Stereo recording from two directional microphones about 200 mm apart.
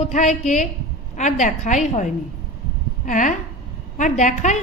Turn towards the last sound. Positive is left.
turn(degrees=35)  # may be behind; listen again after turning